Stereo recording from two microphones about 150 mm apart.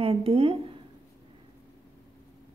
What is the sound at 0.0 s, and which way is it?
Speech, 40° right (ahead or behind).